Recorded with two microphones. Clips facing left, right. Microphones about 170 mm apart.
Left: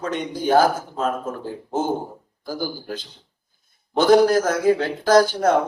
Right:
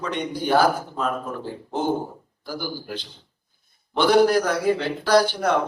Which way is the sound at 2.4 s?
45° left (ahead or behind).